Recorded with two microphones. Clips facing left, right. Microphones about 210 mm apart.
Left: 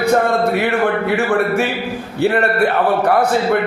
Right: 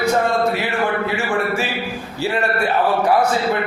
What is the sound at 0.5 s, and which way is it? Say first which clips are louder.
A man's voice: left 4 dB; 60° left (ahead or behind).